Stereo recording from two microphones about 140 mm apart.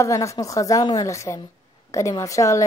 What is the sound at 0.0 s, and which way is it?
Speech, 20° left (ahead or behind).